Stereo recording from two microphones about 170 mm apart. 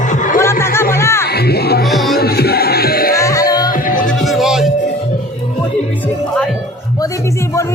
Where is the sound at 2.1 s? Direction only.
70° left (ahead or behind).